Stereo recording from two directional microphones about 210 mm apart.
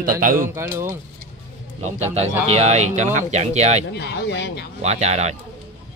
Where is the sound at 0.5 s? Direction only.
10° right (ahead or behind).